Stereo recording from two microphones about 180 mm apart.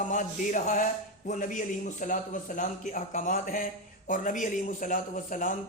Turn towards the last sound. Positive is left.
turn(degrees=50)  # may be behind; listen again after turning